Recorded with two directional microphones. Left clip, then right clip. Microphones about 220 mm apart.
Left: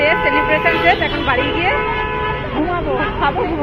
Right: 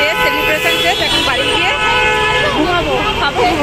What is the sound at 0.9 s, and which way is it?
Speech, 5° right (ahead or behind).